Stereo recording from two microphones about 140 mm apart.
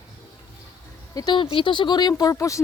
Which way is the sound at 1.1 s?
25° left (ahead or behind).